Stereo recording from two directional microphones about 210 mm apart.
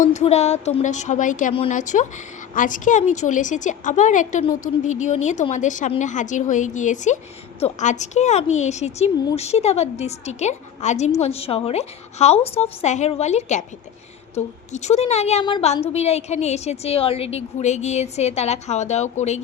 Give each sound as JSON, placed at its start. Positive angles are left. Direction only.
{"t": 0.0, "sound": "a woman's voice", "side_deg": 35}